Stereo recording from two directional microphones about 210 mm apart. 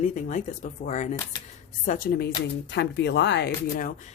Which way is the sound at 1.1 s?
15° left (ahead or behind).